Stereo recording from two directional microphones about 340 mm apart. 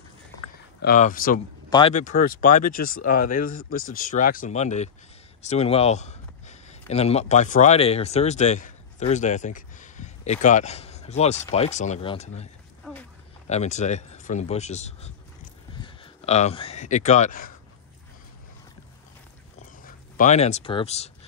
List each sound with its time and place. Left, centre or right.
0.7 s speech: left
13.5 s speech: centre
19.8 s speech: left